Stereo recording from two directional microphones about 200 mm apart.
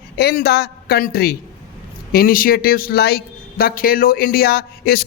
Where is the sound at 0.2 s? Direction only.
50° left (ahead or behind).